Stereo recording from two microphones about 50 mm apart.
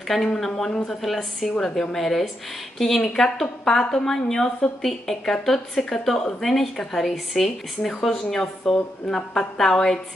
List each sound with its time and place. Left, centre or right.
0.1 s speech: centre
0.7 s a woman's voice: centre
1.0 s a woman's voice: centre